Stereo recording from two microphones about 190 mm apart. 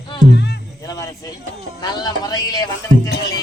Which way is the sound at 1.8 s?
20° left (ahead or behind).